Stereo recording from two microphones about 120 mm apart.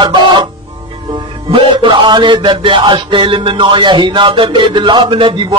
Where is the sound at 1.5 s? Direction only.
45° right (ahead or behind).